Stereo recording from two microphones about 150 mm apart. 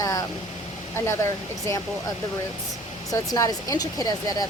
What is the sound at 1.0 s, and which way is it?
Speech, 20° left (ahead or behind).